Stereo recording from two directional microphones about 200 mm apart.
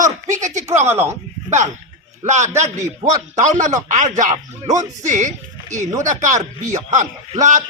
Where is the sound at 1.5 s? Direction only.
35° right (ahead or behind).